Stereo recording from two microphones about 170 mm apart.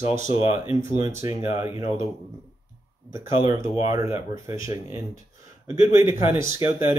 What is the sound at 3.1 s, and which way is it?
Speech, 20° right (ahead or behind).